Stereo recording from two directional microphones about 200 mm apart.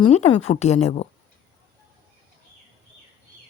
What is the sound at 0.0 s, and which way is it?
Speech, 35° left (ahead or behind).